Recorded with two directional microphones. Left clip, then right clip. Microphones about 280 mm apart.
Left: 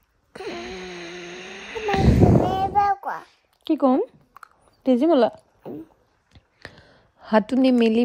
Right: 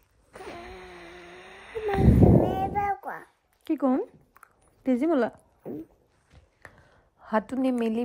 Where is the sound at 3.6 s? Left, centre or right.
Left.